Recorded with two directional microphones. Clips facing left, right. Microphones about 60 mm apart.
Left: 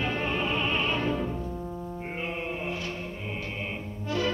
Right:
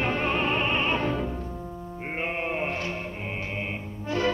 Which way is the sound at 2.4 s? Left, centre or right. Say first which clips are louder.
Right 4 dB; right.